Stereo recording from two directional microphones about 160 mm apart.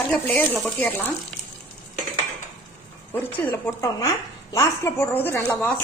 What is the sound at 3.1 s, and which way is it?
A woman's voice, 10° left (ahead or behind).